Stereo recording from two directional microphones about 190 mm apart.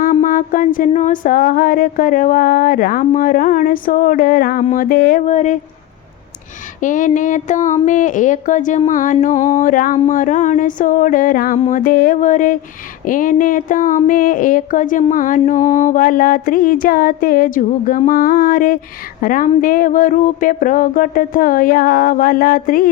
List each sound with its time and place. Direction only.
0.0 s speech: 40° left (ahead or behind)
6.7 s speech: 45° left (ahead or behind)